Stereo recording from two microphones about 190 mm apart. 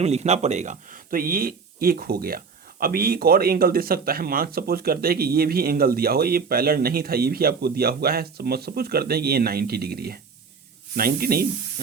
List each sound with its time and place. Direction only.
0.0 s speech: 35° right (ahead or behind); by 11.4 s 50° right (ahead or behind)